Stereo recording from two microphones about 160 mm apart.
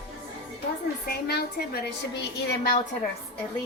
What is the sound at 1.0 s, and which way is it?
Speech, 80° left.